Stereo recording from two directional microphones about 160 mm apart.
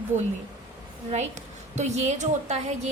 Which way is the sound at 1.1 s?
45° right (ahead or behind).